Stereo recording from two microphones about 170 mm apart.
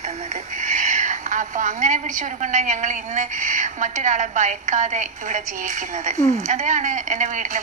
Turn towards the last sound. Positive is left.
turn(degrees=-45)  # may be behind; listen again after turning